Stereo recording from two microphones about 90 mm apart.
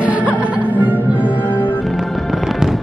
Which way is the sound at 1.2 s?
20° left (ahead or behind).